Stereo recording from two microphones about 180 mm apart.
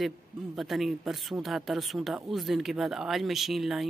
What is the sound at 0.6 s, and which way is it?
Speech, centre (ahead or behind).